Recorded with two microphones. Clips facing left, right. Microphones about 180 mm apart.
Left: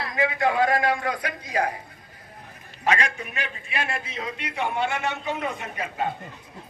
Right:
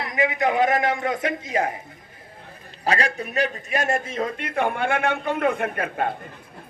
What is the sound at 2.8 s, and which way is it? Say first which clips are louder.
A man's voice: right 1 dB; 35° right (ahead or behind).